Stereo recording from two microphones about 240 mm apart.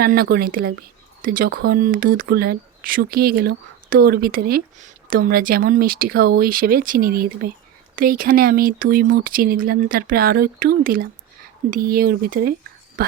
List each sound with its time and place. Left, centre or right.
0.0 s speech: right